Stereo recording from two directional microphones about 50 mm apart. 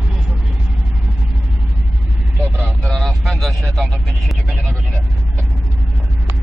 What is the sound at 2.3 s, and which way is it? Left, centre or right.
Vehicle, right.